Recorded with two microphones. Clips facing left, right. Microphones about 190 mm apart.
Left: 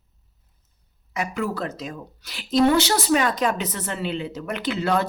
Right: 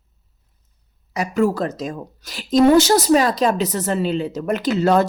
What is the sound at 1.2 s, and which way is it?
A woman's voice, 40° right (ahead or behind).